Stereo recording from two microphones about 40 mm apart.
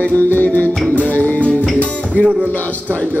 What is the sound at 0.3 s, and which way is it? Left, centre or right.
Music, left.